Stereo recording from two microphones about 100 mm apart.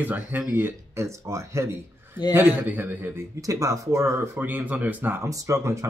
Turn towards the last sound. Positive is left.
turn(degrees=-30)  # may be behind; listen again after turning